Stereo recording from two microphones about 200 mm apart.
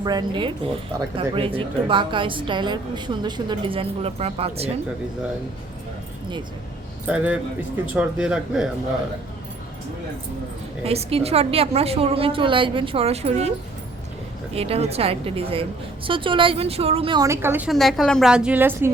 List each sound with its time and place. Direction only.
0.0 s speech: 20° right (ahead or behind)
7.1 s a man's voice: 5° right (ahead or behind)
10.8 s speech: 30° right (ahead or behind)
14.5 s speech: 30° right (ahead or behind); by 17.7 s 10° right (ahead or behind)
17.7 s a woman's voice: centre (ahead or behind)